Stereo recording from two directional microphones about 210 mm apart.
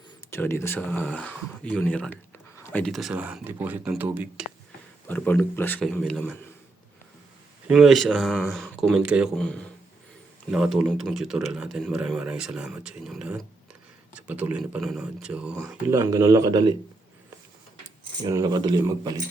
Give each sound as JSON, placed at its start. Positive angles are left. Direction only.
{"t": 0.3, "sound": "speech", "side_deg": 10}
{"t": 5.0, "sound": "speech", "side_deg": 10}
{"t": 7.7, "sound": "a man's voice", "side_deg": 0}
{"t": 15.9, "sound": "speech", "side_deg": -15}
{"t": 18.2, "sound": "speech", "side_deg": -20}